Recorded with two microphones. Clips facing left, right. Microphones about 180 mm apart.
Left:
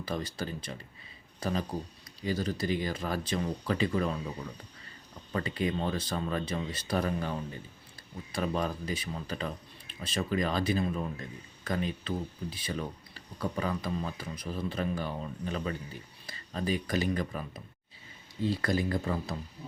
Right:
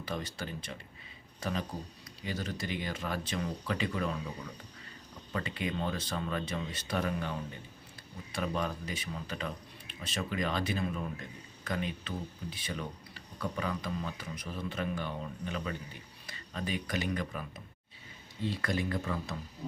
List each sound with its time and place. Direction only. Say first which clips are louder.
0.0 s speech: left 3 dB; 35° left (ahead or behind)
5.3 s speech: left 4 dB; 35° left (ahead or behind)
18.6 s speech: left 3 dB; 35° left (ahead or behind)